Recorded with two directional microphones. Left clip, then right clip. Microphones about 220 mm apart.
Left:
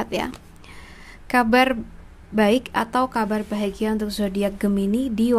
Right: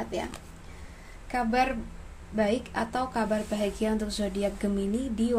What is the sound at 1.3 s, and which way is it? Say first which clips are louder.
A woman's voice: left 9 dB; 35° left (ahead or behind).